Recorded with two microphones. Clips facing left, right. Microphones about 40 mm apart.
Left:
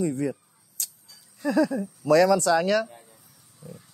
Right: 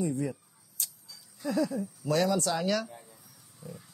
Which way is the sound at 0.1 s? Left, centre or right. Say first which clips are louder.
Left 5 dB; left.